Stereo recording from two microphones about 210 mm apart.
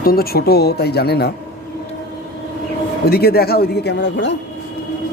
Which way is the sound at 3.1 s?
45° left (ahead or behind).